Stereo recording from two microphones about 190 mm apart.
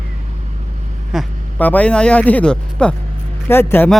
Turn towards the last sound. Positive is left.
turn(degrees=10)  # may be behind; listen again after turning